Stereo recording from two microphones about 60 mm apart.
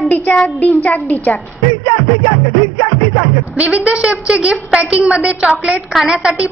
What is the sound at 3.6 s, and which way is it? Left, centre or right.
A woman's voice, right.